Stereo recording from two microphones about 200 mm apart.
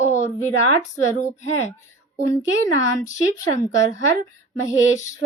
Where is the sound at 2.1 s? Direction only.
15° left (ahead or behind).